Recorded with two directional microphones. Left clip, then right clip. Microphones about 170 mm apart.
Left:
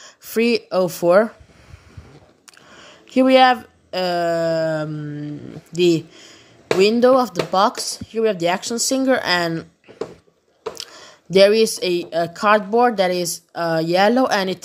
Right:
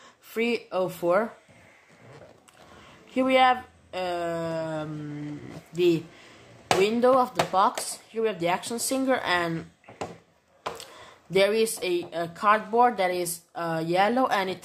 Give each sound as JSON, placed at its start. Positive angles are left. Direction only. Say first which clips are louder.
{"t": 0.0, "sound": "speech", "louder": "left 9 dB", "side_deg": 40}
{"t": 2.8, "sound": "speech", "louder": "left 10 dB", "side_deg": 40}
{"t": 11.3, "sound": "speech", "louder": "left 9 dB", "side_deg": 35}